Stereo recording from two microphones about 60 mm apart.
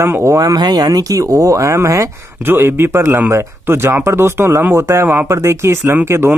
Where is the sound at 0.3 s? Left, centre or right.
Right.